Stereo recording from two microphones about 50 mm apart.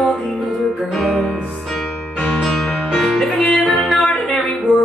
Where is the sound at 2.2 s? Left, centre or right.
Centre.